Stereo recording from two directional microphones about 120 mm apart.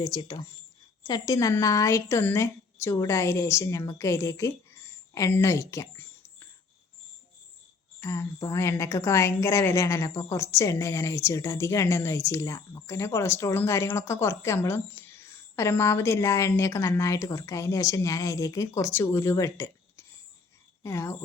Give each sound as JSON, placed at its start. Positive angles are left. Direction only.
{"t": 0.0, "sound": "a woman's voice", "side_deg": 35}
{"t": 8.0, "sound": "a woman's voice", "side_deg": 25}